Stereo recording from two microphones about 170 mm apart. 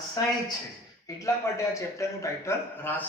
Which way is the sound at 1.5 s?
15° left (ahead or behind).